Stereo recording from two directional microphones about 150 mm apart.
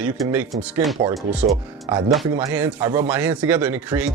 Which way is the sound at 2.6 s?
10° right (ahead or behind).